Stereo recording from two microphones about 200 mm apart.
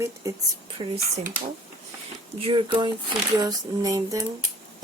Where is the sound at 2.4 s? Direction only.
25° right (ahead or behind).